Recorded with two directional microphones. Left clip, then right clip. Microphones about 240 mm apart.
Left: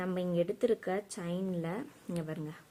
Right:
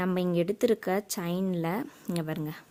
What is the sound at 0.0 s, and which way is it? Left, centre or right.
Speech, right.